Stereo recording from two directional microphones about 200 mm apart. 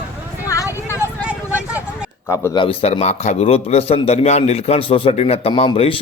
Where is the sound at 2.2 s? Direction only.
15° left (ahead or behind).